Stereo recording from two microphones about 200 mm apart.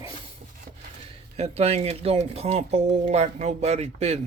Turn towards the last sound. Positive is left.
turn(degrees=-30)  # may be behind; listen again after turning